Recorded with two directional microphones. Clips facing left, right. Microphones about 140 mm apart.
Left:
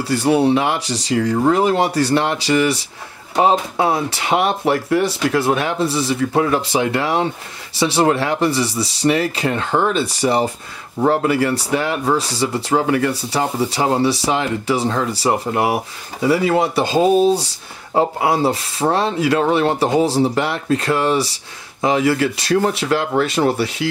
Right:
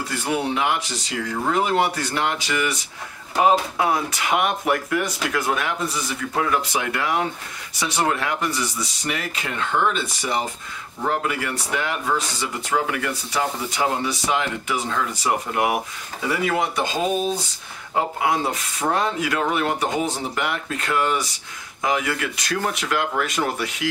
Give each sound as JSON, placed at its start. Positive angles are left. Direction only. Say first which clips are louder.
{"t": 0.0, "sound": "speech", "louder": "left 9 dB", "side_deg": 35}